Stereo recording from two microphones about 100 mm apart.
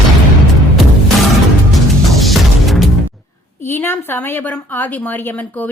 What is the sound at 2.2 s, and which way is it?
Music, centre (ahead or behind).